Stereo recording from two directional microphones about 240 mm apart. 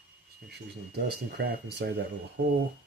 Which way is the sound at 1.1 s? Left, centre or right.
Right.